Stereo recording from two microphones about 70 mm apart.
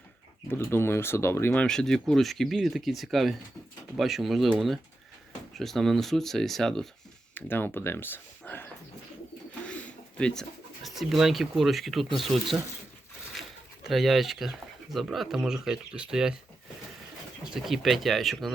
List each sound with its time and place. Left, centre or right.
0.5 s speech: left
1.5 s speech: centre
7.3 s speech: left
9.6 s pigeon: centre
10.8 s speech: centre
13.8 s speech: centre
17.5 s speech: centre